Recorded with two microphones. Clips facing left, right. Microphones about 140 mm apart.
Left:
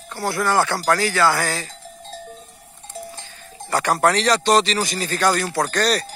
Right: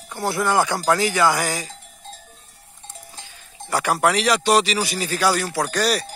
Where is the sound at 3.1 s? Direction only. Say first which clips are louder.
Left 4 dB; 10° right (ahead or behind).